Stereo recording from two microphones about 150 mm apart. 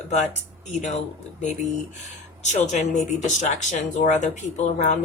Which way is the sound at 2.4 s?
50° left (ahead or behind).